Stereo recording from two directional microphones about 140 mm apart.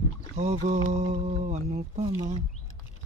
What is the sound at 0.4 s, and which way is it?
Speech, 55° right (ahead or behind).